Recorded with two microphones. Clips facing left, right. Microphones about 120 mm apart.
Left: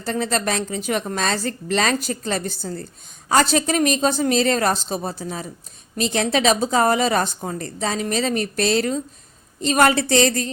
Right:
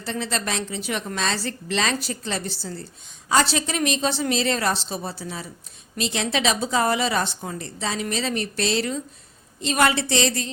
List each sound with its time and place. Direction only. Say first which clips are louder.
0.0 s a woman's voice: left 5 dB; 45° left (ahead or behind)